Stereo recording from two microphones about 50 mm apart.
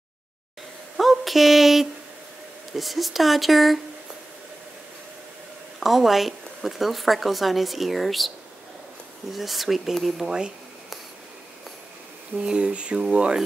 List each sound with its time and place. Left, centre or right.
0.9 s a sound: centre
2.7 s speech: centre
5.8 s speech: centre
9.3 s speech: centre
12.4 s speech: centre